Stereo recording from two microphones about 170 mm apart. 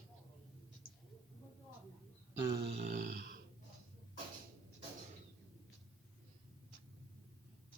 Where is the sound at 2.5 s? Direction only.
40° right (ahead or behind); by 3.3 s 65° right (ahead or behind).